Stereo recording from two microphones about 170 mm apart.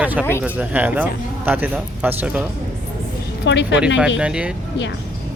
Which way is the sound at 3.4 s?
90° left.